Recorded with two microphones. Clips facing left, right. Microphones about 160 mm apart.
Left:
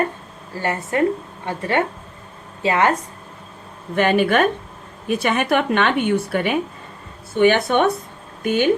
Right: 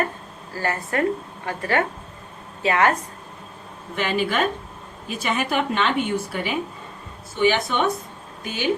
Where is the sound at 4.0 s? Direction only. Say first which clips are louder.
Left 6 dB; 55° left (ahead or behind).